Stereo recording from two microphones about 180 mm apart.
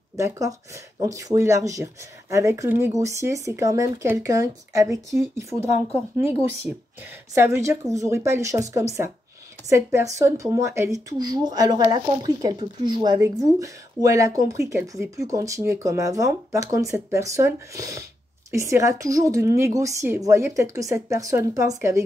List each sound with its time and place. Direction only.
0.1 s speech: 20° right (ahead or behind)
6.7 s speech: 5° right (ahead or behind)